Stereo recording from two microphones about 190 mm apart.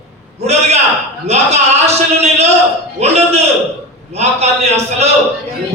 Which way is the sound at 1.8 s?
35° right (ahead or behind).